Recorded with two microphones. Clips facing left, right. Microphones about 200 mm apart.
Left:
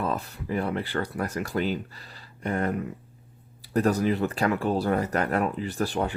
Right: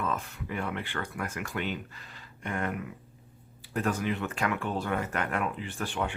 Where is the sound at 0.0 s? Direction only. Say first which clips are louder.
Left 4 dB; 35° left (ahead or behind).